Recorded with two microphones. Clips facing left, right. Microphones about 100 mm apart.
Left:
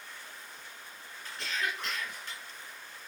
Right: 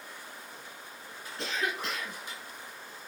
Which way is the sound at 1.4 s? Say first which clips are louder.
Right 2 dB; 20° right (ahead or behind).